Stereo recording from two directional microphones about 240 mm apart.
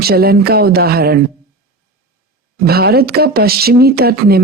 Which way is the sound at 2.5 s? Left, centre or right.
Right.